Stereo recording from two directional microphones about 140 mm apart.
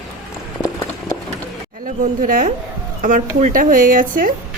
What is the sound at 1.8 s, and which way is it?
Speech, 80° right.